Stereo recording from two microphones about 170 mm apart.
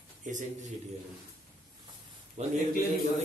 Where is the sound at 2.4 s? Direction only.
40° right (ahead or behind).